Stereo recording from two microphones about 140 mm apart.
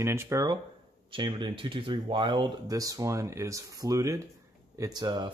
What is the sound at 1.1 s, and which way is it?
Speech, 35° right (ahead or behind).